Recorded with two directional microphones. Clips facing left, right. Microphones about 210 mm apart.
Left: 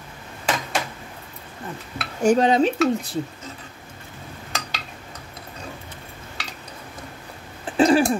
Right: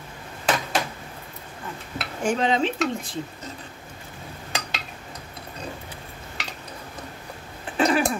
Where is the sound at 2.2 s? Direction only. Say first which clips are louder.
Left 6 dB; 40° left (ahead or behind).